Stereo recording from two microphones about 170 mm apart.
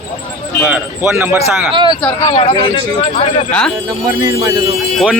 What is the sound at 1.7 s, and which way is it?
Speech, 30° right (ahead or behind).